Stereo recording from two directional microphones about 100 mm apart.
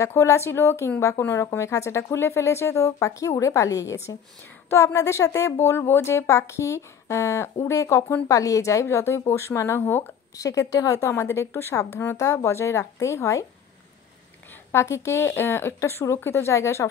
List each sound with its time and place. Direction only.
0.0 s a woman's voice: 30° left (ahead or behind)
10.3 s speech: 35° left (ahead or behind)
14.7 s speech: 25° left (ahead or behind)